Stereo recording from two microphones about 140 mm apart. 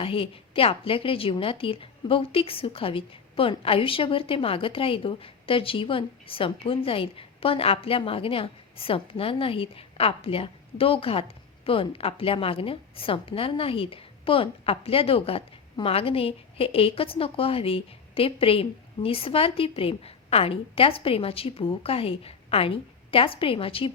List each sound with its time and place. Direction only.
0.0 s a woman's voice: 40° left (ahead or behind)